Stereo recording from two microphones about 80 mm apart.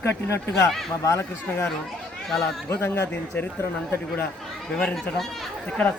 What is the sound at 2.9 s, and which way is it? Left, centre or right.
Speech, left.